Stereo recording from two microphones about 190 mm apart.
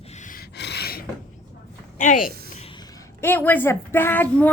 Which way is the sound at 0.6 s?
60° left (ahead or behind).